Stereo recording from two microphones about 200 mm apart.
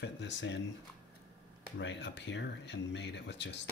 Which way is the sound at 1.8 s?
60° left (ahead or behind).